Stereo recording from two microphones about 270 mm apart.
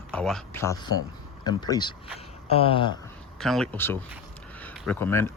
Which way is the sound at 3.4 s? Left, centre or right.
Centre.